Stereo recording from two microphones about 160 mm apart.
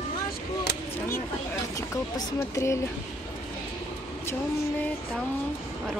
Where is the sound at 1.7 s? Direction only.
20° left (ahead or behind).